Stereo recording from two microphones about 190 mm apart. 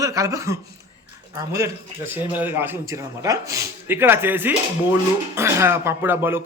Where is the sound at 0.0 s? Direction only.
15° right (ahead or behind).